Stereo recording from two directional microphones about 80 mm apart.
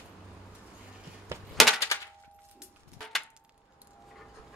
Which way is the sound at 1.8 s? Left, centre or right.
Left.